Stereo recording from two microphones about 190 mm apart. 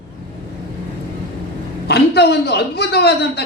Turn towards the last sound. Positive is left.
turn(degrees=60)  # may be behind; listen again after turning